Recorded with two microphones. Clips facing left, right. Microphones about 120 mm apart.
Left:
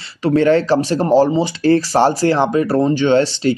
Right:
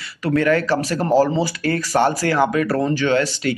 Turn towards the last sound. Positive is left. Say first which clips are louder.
# left 5 dB
turn(degrees=30)  # may be behind; listen again after turning